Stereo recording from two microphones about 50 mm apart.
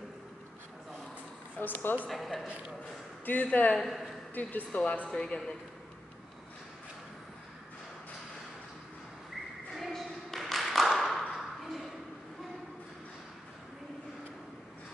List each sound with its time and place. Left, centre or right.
1.6 s a woman's voice: left
2.0 s speech: centre
3.4 s a woman's voice: left
3.7 s speech: centre
4.4 s a woman's voice: left
5.1 s a man's voice: centre
9.8 s a sound: centre
11.3 s ping: centre